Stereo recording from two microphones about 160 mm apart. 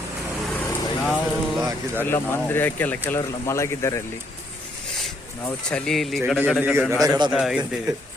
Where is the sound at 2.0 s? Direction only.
15° left (ahead or behind).